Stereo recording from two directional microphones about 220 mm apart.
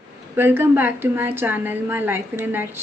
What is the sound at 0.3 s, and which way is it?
A woman's voice, 10° right (ahead or behind).